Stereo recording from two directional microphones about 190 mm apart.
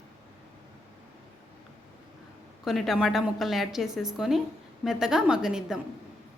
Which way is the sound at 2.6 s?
Centre (ahead or behind).